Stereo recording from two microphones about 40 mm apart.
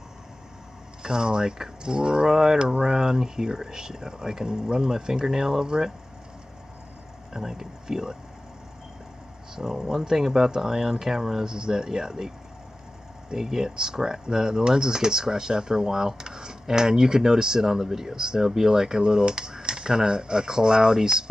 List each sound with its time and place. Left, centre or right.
1.0 s speech: centre
7.3 s speech: centre
9.6 s speech: centre
13.3 s speech: centre